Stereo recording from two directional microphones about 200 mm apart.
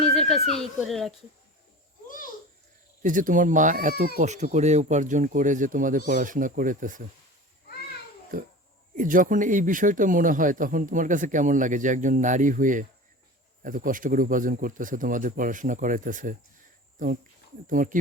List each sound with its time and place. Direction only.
0.0 s a sound: centre (ahead or behind)
0.5 s speech: centre (ahead or behind)
2.0 s a sound: 45° left (ahead or behind)
3.0 s speech: 40° right (ahead or behind)
9.0 s speech: 40° right (ahead or behind)
17.7 s speech: 40° right (ahead or behind)